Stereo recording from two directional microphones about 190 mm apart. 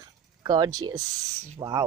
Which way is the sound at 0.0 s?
20° right (ahead or behind).